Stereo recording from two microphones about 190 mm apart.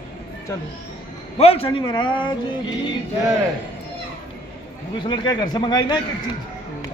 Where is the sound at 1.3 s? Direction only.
30° left (ahead or behind).